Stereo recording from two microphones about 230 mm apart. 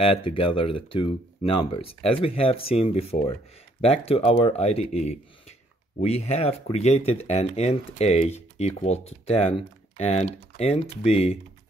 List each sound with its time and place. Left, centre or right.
0.0 s speech: left